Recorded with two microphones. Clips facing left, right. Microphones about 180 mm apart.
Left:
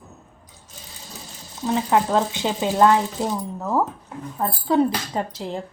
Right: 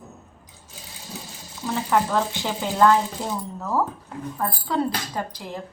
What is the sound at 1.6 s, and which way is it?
A woman's voice, 20° left (ahead or behind).